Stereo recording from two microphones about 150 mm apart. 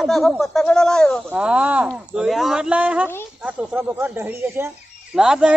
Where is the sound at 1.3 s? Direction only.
5° right (ahead or behind).